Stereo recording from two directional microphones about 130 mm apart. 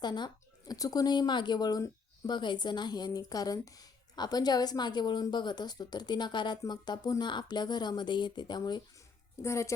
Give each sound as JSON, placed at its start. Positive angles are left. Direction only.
{"t": 0.0, "sound": "speech", "side_deg": 35}
{"t": 9.4, "sound": "a woman's voice", "side_deg": 20}